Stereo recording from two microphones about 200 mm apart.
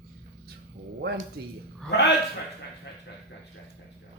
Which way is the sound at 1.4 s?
55° right (ahead or behind).